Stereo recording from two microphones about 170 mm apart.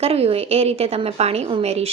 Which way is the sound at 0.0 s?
35° right (ahead or behind).